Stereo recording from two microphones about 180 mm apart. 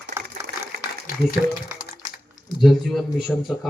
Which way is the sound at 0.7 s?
60° right (ahead or behind).